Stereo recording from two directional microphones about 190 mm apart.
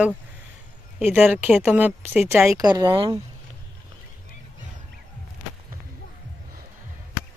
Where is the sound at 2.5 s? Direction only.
20° right (ahead or behind).